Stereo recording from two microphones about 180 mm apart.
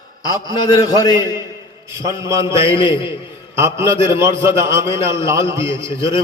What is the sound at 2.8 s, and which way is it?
Speech, 25° left (ahead or behind).